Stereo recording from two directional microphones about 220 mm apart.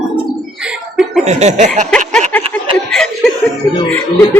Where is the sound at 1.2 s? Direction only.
30° right (ahead or behind).